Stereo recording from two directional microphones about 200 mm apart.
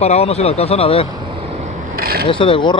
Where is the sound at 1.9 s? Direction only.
50° right (ahead or behind).